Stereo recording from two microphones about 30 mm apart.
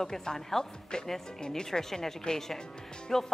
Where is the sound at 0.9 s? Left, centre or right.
Left.